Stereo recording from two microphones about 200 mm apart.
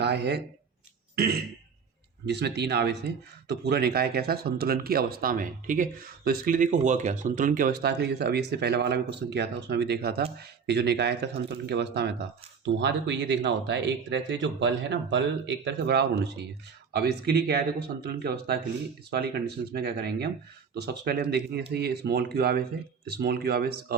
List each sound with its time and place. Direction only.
0.0 s speech: 55° right (ahead or behind)
1.1 s throat clearing: 50° right (ahead or behind)
2.2 s speech: 55° right (ahead or behind)